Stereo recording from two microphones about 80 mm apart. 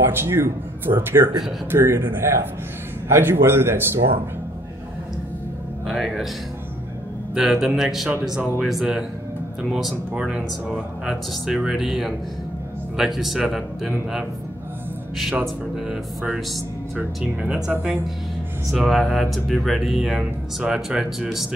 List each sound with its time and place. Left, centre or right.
0.0 s speech: right
5.9 s speech: centre
7.3 s speech: centre
15.4 s speech: centre
18.7 s speech: centre